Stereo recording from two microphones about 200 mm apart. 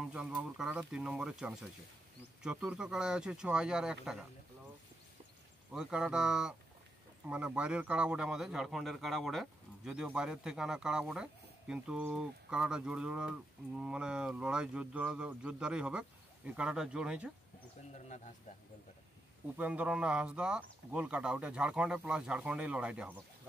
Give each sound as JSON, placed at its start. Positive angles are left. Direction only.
{"t": 0.0, "sound": "speech", "side_deg": -5}
{"t": 5.7, "sound": "speech", "side_deg": -5}
{"t": 18.0, "sound": "speech", "side_deg": 35}
{"t": 19.5, "sound": "speech", "side_deg": -5}